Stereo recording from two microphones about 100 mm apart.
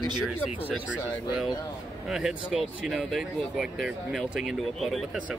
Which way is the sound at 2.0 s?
5° right (ahead or behind).